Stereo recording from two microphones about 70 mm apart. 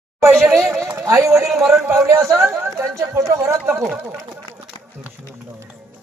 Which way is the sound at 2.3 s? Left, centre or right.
Right.